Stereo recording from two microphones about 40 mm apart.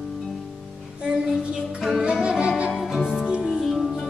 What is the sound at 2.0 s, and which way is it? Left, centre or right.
Music, right.